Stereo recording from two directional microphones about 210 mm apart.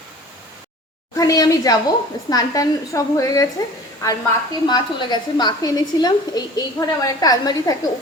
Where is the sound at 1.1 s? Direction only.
15° left (ahead or behind).